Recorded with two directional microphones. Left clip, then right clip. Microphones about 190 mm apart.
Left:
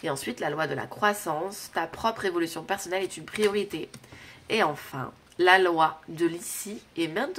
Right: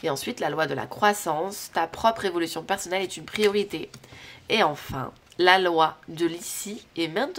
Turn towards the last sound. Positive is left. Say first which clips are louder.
# right 2 dB
turn(degrees=-30)  # may be behind; listen again after turning